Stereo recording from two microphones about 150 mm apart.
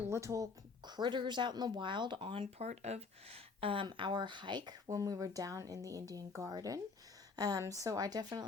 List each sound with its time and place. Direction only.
0.1 s speech: 20° right (ahead or behind)
0.9 s speech: 30° right (ahead or behind)